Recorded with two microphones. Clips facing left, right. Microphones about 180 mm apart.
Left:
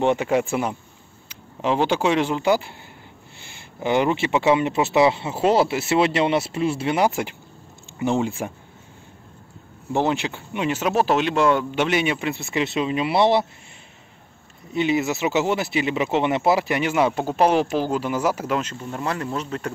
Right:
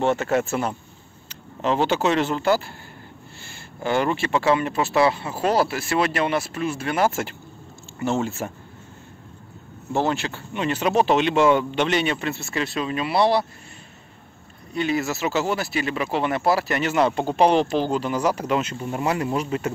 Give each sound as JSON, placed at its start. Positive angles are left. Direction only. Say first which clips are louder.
{"t": 0.0, "sound": "speech", "louder": "left 1 dB", "side_deg": 15}
{"t": 3.8, "sound": "speech", "louder": "left 2 dB", "side_deg": 15}
{"t": 9.9, "sound": "speech", "louder": "left 1 dB", "side_deg": 15}
{"t": 14.7, "sound": "speech", "louder": "left 2 dB", "side_deg": 20}
{"t": 18.6, "sound": "speech", "louder": "right 3 dB", "side_deg": -10}